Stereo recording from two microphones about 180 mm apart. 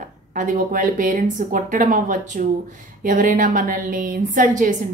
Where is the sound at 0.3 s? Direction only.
45° right (ahead or behind).